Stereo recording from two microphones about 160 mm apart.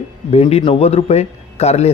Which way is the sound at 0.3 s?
40° left (ahead or behind).